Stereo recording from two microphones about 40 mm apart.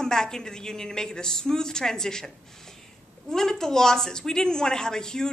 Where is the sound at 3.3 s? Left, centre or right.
Centre.